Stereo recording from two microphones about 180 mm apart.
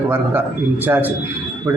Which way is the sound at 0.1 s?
10° right (ahead or behind).